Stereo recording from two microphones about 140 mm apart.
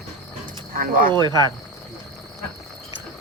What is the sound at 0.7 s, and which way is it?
Speech, 85° right.